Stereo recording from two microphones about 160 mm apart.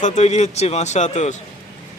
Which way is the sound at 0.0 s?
45° left (ahead or behind).